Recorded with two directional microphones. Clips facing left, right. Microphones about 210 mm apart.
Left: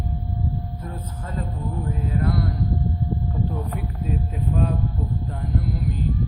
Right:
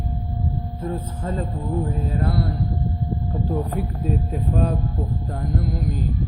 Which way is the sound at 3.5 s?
35° right (ahead or behind).